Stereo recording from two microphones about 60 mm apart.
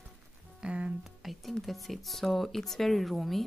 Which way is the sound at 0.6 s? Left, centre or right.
Right.